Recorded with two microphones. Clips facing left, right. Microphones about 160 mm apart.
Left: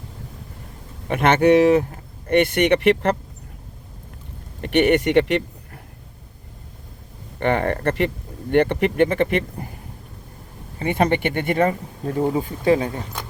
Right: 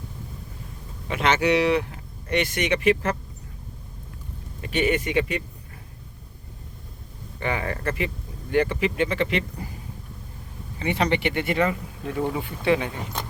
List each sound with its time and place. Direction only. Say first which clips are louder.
1.0 s speech: left 6 dB; 50° left (ahead or behind)
4.6 s speech: left 7 dB; 65° left (ahead or behind)
7.3 s speech: left 7 dB; 60° left (ahead or behind)
10.8 s speech: left 4 dB; 50° left (ahead or behind)